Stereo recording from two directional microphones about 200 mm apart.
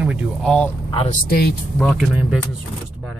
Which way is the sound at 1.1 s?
50° left (ahead or behind).